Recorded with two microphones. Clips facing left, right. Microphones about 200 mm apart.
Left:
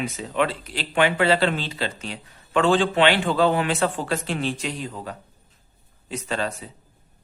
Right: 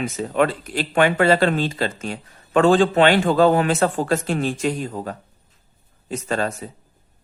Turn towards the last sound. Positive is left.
turn(degrees=-45)  # may be behind; listen again after turning